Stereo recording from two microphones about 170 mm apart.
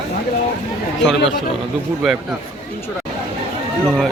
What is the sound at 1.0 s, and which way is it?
Speech, 90° left.